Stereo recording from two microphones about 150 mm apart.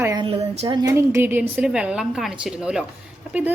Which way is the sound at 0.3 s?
40° right (ahead or behind).